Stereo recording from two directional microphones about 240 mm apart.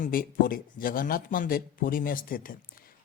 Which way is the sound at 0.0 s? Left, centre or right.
Left.